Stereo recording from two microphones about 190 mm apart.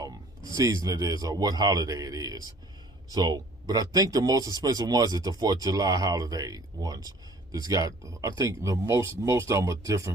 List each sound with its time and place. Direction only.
0.5 s speech: 20° right (ahead or behind)